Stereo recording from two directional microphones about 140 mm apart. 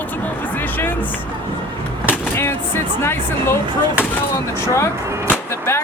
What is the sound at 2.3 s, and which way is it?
Vehicle, 15° left (ahead or behind).